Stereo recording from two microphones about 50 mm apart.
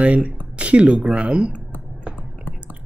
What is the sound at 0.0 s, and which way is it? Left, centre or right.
Speech, right.